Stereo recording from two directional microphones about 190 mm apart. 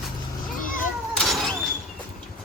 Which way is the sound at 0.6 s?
45° left (ahead or behind).